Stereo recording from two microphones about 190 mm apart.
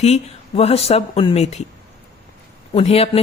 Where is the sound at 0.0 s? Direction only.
35° left (ahead or behind).